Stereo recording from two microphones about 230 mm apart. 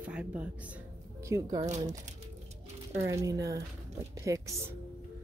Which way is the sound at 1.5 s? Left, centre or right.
Right.